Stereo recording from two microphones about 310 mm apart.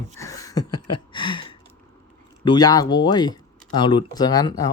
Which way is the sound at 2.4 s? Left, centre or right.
Centre.